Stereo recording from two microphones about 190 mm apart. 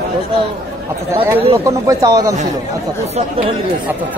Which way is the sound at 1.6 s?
15° right (ahead or behind).